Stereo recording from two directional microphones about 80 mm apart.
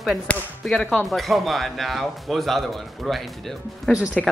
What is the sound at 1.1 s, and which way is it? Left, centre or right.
Speech, centre.